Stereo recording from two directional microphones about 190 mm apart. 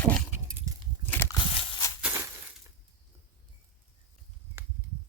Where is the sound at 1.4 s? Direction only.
30° left (ahead or behind).